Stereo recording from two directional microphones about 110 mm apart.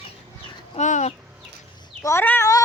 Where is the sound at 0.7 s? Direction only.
85° left.